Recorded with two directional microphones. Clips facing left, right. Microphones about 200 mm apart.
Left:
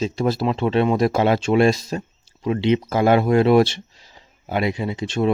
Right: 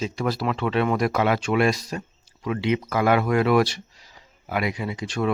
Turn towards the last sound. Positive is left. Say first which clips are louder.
# left 4 dB
turn(degrees=25)  # may be behind; listen again after turning